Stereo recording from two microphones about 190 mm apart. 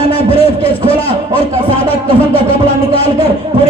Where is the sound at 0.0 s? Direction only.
30° left (ahead or behind).